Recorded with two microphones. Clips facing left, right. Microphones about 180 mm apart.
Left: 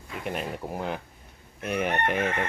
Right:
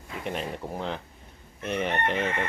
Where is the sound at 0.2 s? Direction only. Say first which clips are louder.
Even; 5° left (ahead or behind).